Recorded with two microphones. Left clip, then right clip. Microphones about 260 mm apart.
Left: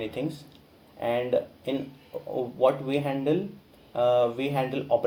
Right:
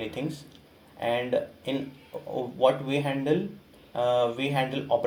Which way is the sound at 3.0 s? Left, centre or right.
Right.